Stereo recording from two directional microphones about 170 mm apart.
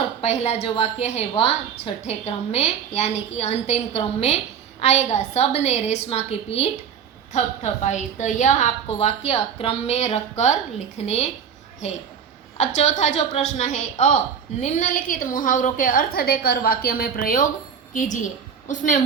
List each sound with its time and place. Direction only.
0.2 s a woman's voice: 40° left (ahead or behind)